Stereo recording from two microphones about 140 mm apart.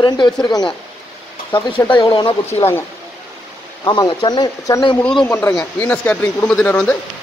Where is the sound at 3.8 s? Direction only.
35° left (ahead or behind).